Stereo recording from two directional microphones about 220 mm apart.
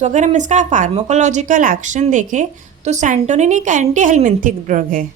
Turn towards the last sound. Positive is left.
turn(degrees=-35)  # may be behind; listen again after turning